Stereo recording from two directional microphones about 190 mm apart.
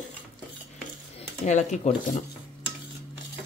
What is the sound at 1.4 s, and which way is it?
Speech, 40° left (ahead or behind).